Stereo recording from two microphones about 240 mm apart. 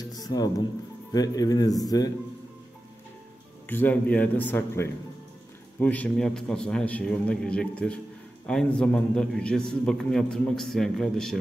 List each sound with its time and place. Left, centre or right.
0.0 s music: centre
1.1 s a man's voice: centre
3.6 s a man's voice: centre